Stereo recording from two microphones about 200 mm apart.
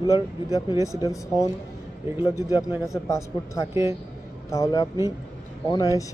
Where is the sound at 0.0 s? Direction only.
15° left (ahead or behind).